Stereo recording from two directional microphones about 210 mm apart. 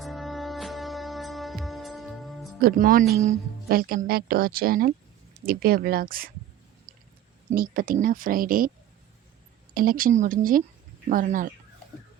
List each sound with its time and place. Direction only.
0.0 s music: centre (ahead or behind)
2.6 s speech: 45° right (ahead or behind)
7.5 s speech: 45° right (ahead or behind)
9.7 s speech: 45° right (ahead or behind)